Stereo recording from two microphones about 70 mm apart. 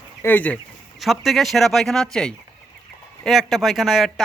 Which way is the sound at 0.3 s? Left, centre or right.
Left.